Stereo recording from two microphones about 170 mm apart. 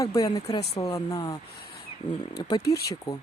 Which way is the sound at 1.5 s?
65° left (ahead or behind).